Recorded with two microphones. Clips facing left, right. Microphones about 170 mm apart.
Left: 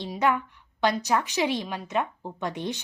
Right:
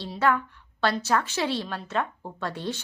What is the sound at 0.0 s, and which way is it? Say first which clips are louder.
A woman's voice: even; 15° left (ahead or behind).